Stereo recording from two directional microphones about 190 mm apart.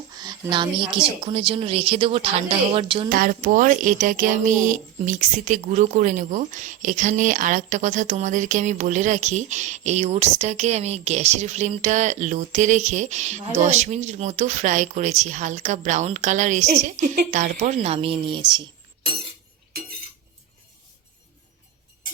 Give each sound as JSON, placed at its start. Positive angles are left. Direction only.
{"t": 0.1, "sound": "a woman's voice", "side_deg": -20}
{"t": 3.1, "sound": "a woman's voice", "side_deg": -50}